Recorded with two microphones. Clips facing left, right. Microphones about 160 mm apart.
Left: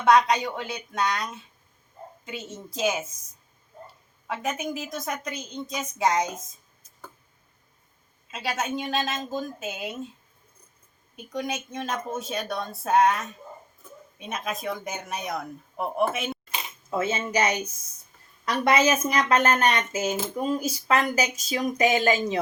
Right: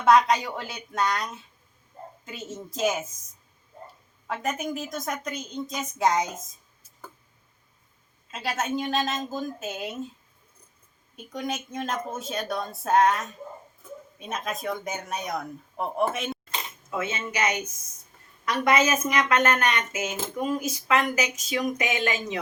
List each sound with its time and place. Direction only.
0.0 s speech: centre (ahead or behind)
4.3 s speech: centre (ahead or behind)
8.3 s speech: centre (ahead or behind)
11.3 s speech: centre (ahead or behind)
16.9 s speech: 35° left (ahead or behind)